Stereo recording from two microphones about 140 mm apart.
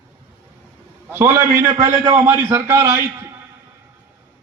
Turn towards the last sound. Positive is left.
turn(degrees=-20)  # may be behind; listen again after turning